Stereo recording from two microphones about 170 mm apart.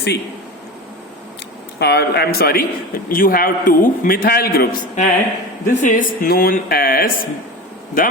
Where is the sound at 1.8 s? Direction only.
75° left (ahead or behind); by 8.1 s 55° left (ahead or behind).